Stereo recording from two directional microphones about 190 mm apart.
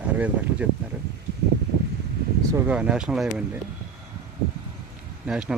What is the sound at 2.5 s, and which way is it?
Speech, 5° right (ahead or behind).